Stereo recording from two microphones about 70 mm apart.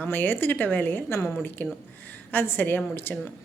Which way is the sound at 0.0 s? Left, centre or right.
Left.